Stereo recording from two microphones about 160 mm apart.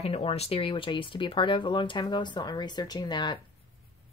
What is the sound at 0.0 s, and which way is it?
Speech, 35° left (ahead or behind).